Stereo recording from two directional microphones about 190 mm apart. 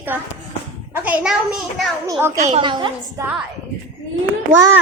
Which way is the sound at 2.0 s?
15° right (ahead or behind).